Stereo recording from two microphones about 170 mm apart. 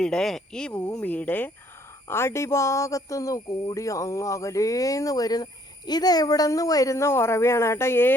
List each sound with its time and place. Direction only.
0.0 s speech: 5° left (ahead or behind)